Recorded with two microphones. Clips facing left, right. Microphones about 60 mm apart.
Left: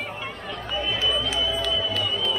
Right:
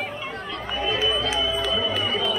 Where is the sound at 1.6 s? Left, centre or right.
Right.